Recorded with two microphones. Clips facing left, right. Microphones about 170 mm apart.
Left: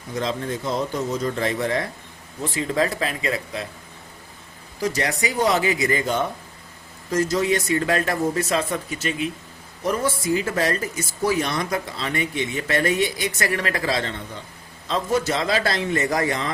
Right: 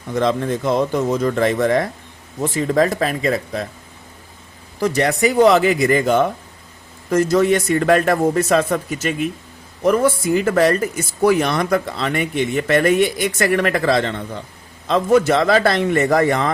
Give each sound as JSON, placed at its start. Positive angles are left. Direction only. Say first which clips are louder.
{"t": 0.1, "sound": "speech", "louder": "right 7 dB", "side_deg": -60}
{"t": 4.8, "sound": "speech", "louder": "right 7 dB", "side_deg": -60}
{"t": 9.8, "sound": "speech", "louder": "right 7 dB", "side_deg": -60}